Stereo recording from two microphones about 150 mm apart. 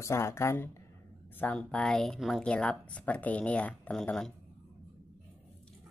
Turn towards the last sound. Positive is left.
turn(degrees=5)  # may be behind; listen again after turning